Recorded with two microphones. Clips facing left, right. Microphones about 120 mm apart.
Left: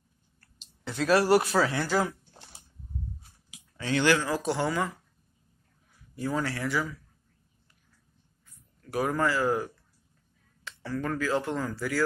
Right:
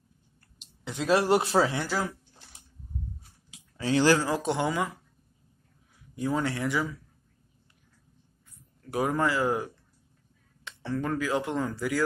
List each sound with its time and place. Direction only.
0.4 s speech: 20° right (ahead or behind)
3.4 s speech: 30° right (ahead or behind)
6.1 s speech: 20° right (ahead or behind)
8.9 s speech: 20° right (ahead or behind)